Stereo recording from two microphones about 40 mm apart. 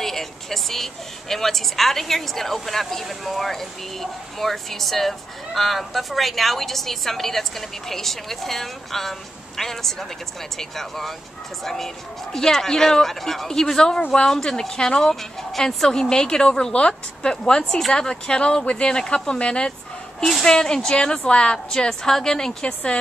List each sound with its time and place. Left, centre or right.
0.0 s vehicle: centre
1.3 s speech: centre; by 14.3 s left
14.3 s speech: centre
22.6 s speech: left